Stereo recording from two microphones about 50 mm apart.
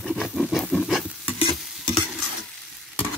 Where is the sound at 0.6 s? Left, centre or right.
Centre.